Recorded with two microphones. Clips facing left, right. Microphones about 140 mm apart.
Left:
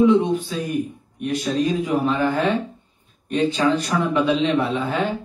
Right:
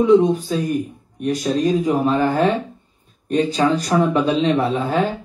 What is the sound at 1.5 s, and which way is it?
Speech, 35° right (ahead or behind).